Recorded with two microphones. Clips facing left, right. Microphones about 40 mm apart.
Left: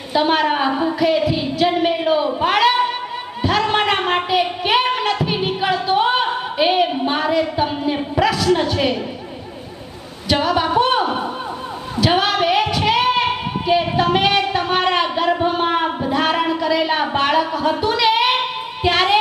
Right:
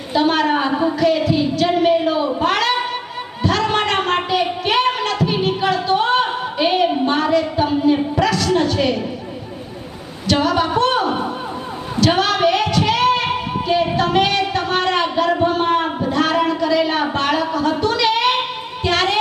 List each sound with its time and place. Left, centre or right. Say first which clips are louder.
0.1 s a sound: even; centre
3.4 s music: left 1 dB; centre
8.5 s a sound: right 1 dB; centre
10.2 s a woman's voice: right 1 dB; centre
11.9 s singing: even; centre
13.7 s speech: left 1 dB; centre